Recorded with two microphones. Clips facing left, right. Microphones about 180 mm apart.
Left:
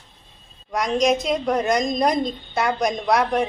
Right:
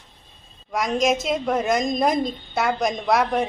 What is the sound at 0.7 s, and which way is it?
A woman's voice, 5° right (ahead or behind).